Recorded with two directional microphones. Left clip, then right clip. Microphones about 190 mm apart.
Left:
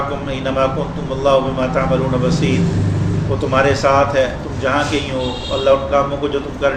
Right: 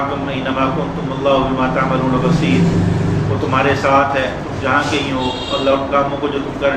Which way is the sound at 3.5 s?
55° left (ahead or behind).